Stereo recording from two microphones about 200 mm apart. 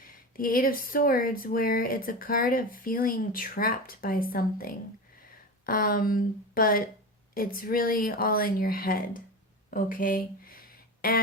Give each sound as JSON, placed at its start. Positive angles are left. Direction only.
{"t": 0.3, "sound": "speech", "side_deg": 45}